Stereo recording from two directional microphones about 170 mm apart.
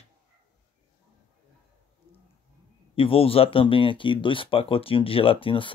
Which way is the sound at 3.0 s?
35° left (ahead or behind).